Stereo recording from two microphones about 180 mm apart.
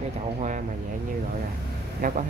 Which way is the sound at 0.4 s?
45° right (ahead or behind).